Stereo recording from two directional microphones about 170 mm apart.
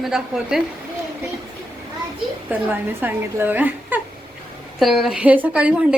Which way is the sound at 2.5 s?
10° right (ahead or behind).